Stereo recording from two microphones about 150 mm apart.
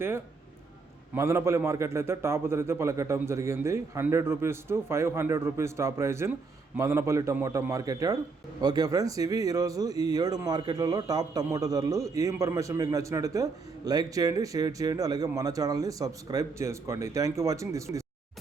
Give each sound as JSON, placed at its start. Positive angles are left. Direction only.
{"t": 1.1, "sound": "a man's voice", "side_deg": -15}